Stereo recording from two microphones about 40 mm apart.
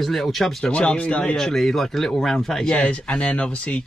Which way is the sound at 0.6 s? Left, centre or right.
Left.